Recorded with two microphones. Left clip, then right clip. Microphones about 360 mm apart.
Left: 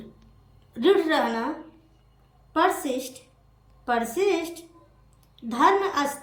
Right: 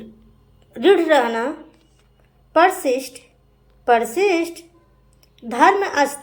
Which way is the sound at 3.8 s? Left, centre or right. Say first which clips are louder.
Right 8 dB; centre.